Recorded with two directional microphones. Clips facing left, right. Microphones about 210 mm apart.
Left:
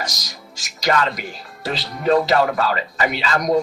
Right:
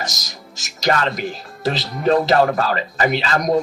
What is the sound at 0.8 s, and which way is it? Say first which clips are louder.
Speech: right 1 dB; 40° right (ahead or behind).